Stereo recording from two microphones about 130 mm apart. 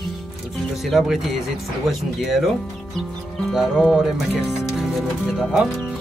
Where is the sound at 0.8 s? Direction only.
Centre (ahead or behind).